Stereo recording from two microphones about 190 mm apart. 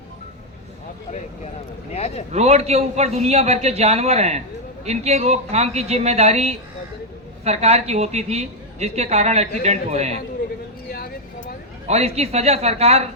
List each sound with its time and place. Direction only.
1.9 s speech: 35° left (ahead or behind)
2.3 s a woman's voice: 35° right (ahead or behind)
11.9 s a woman's voice: 35° right (ahead or behind)